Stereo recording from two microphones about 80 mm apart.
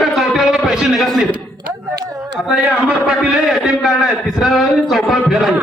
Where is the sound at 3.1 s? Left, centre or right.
Centre.